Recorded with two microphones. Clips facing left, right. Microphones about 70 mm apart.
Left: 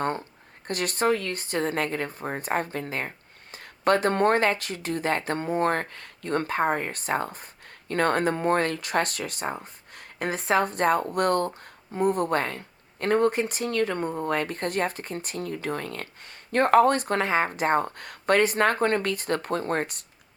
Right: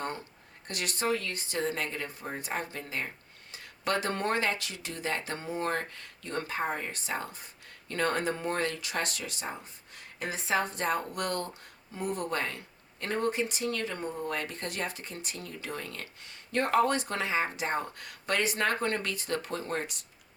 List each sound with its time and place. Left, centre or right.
0.7 s speech: left